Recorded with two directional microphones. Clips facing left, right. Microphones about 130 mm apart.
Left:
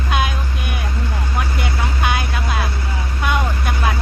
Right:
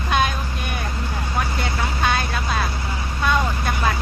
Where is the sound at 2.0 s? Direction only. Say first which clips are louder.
Even; 15° left (ahead or behind).